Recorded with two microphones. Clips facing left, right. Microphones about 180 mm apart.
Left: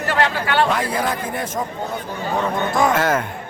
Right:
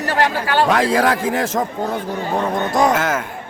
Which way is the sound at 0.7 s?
90° right.